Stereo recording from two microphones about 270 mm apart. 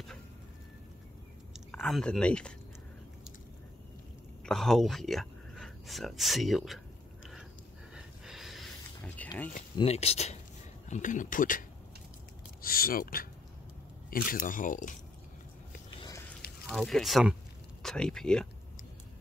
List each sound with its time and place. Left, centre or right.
1.5 s speech: centre
4.5 s speech: centre
7.9 s a sound: centre
9.8 s speech: left
12.6 s speech: left
16.0 s a sound: centre
16.6 s speech: centre